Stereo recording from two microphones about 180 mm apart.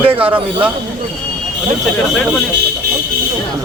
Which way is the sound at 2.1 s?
Centre (ahead or behind).